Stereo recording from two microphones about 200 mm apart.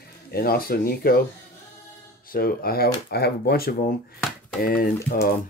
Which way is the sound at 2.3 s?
50° left (ahead or behind).